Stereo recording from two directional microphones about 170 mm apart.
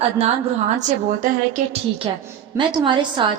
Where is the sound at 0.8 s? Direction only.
50° right (ahead or behind).